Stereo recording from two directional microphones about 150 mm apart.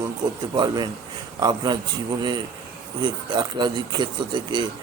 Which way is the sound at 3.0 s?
30° right (ahead or behind).